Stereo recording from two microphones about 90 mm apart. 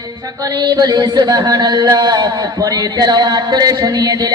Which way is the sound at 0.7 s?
50° right (ahead or behind).